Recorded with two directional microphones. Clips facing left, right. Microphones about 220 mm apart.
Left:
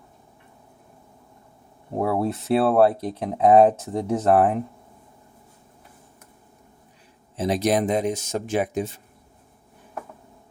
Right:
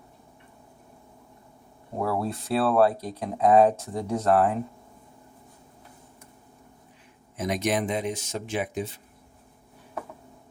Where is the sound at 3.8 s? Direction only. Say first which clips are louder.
Left 4 dB; centre (ahead or behind).